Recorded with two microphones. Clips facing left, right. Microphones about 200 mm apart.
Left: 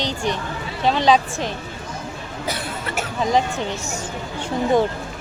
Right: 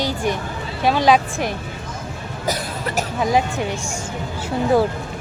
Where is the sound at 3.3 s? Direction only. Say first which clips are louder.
Even; 10° right (ahead or behind).